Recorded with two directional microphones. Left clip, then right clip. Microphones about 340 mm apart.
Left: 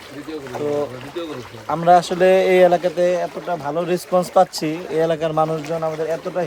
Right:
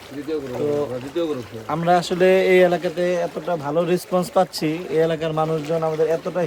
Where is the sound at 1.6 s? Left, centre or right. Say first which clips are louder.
Left 5 dB; centre.